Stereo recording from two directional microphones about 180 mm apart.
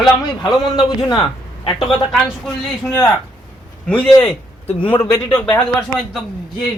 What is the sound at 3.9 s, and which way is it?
A man's voice, 5° left (ahead or behind).